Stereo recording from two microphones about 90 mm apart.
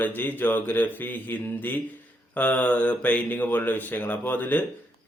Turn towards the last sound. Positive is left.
turn(degrees=20)  # may be behind; listen again after turning